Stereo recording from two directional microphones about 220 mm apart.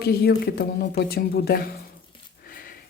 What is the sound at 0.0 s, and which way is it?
Speech, 45° left (ahead or behind).